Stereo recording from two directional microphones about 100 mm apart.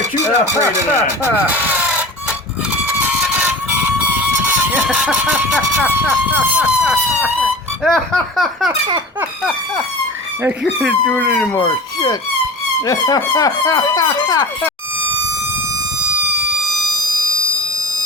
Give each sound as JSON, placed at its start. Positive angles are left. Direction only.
{"t": 0.2, "sound": "speech", "side_deg": -30}
{"t": 1.5, "sound": "a sound", "side_deg": -15}
{"t": 6.6, "sound": "speech", "side_deg": -10}
{"t": 10.6, "sound": "speech", "side_deg": -5}
{"t": 11.0, "sound": "speech", "side_deg": 15}
{"t": 11.3, "sound": "speech", "side_deg": 5}
{"t": 12.8, "sound": "speech", "side_deg": 35}
{"t": 16.6, "sound": "siren", "side_deg": 0}